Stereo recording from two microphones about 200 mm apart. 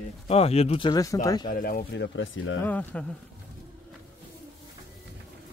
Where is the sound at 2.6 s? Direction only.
10° left (ahead or behind).